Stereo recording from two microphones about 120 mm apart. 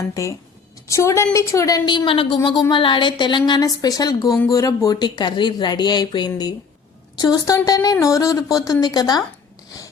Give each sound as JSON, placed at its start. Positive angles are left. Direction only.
{"t": 0.0, "sound": "a woman's voice", "side_deg": 25}